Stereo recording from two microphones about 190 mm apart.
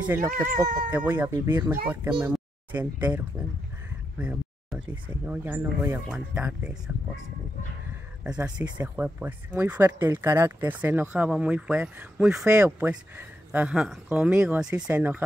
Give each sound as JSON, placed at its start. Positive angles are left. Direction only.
{"t": 0.0, "sound": "speech", "side_deg": -10}
{"t": 8.2, "sound": "speech", "side_deg": -5}